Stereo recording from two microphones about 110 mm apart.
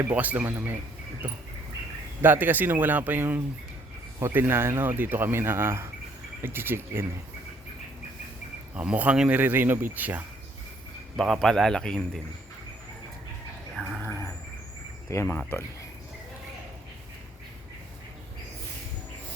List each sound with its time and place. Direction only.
0.1 s speech: 15° right (ahead or behind)
2.2 s speech: 15° right (ahead or behind)
8.7 s speech: 10° right (ahead or behind)
11.2 s a man's voice: centre (ahead or behind)
15.1 s speech: 25° left (ahead or behind)